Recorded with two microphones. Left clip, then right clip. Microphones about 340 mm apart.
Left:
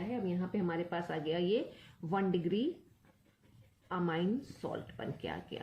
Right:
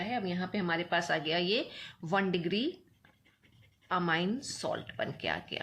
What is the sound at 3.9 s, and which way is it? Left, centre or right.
Speech, right.